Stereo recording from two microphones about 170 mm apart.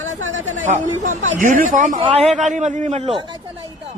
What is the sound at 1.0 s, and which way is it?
Speech, 50° right (ahead or behind).